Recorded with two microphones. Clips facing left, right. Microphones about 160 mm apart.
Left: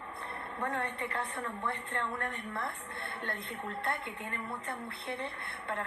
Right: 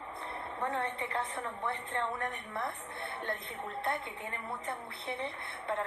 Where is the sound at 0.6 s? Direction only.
20° right (ahead or behind).